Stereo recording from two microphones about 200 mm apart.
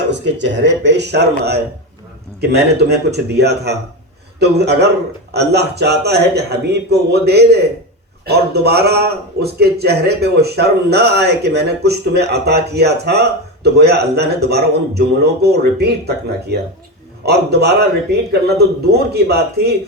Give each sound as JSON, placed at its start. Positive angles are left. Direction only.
{"t": 0.1, "sound": "a man's voice", "side_deg": -60}